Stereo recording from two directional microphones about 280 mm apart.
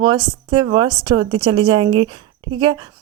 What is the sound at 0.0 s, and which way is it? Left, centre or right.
Speech, centre.